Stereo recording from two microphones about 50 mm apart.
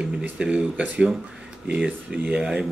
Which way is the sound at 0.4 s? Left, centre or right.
Centre.